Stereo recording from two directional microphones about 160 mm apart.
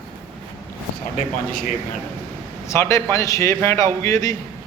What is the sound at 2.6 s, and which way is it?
A man's voice, 20° left (ahead or behind).